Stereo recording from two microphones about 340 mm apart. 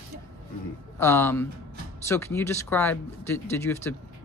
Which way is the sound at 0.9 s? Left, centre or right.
Centre.